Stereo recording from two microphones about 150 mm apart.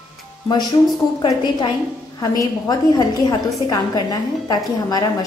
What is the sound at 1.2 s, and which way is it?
A woman's voice, 30° left (ahead or behind).